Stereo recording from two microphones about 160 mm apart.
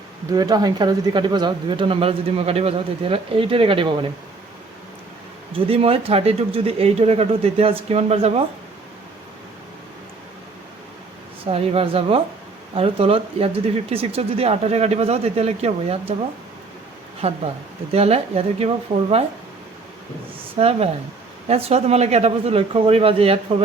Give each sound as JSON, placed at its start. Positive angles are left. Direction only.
{"t": 0.3, "sound": "speech", "side_deg": -25}
{"t": 5.5, "sound": "speech", "side_deg": -35}
{"t": 11.4, "sound": "speech", "side_deg": -35}
{"t": 17.2, "sound": "speech", "side_deg": -40}
{"t": 20.6, "sound": "speech", "side_deg": -40}